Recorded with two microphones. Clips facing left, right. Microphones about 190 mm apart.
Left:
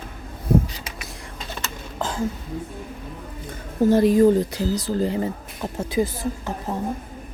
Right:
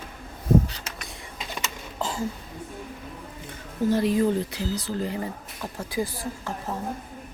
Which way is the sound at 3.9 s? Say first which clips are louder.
Left 7 dB; 45° left (ahead or behind).